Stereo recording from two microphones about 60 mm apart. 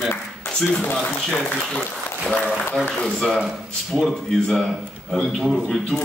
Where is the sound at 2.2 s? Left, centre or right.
Centre.